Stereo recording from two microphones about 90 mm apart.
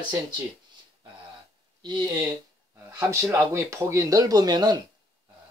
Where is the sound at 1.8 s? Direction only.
55° right (ahead or behind).